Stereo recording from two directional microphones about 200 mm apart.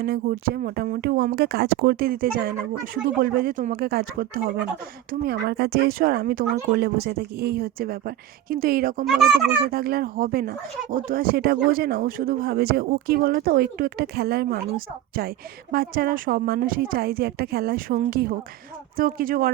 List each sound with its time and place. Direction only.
0.0 s speech: 50° right (ahead or behind)